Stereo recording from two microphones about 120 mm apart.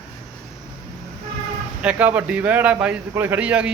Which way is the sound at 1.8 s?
10° right (ahead or behind).